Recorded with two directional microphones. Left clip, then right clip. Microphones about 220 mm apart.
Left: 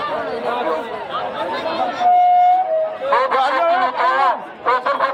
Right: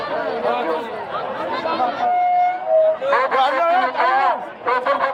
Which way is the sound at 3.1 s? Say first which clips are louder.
Left 1 dB; 25° left (ahead or behind).